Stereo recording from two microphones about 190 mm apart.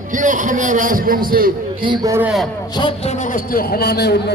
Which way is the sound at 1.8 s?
20° right (ahead or behind).